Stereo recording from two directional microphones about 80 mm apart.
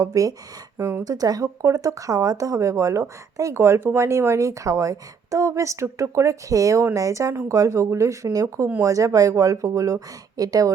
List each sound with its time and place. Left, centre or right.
0.0 s speech: right
1.1 s speech: right